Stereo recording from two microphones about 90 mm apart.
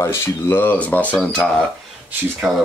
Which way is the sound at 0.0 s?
30° left (ahead or behind).